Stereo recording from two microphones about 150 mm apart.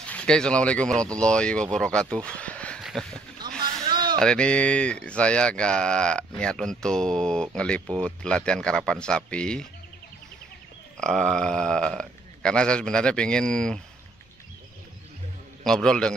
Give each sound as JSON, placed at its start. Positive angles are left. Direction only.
{"t": 0.1, "sound": "speech", "side_deg": 5}
{"t": 2.8, "sound": "a sound", "side_deg": 0}
{"t": 3.9, "sound": "a sound", "side_deg": -30}
{"t": 4.2, "sound": "speech", "side_deg": 5}
{"t": 11.0, "sound": "speech", "side_deg": 5}
{"t": 15.6, "sound": "speech", "side_deg": 5}